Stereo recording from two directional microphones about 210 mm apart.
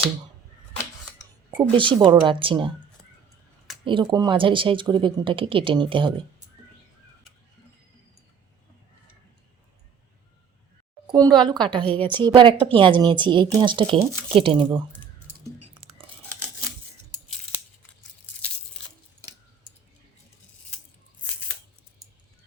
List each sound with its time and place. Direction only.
1.7 s speech: 25° right (ahead or behind)
3.8 s speech: 20° right (ahead or behind)
11.0 s a woman's voice: 20° right (ahead or behind)